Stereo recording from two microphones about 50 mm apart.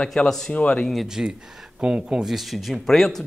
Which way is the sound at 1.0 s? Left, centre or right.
Centre.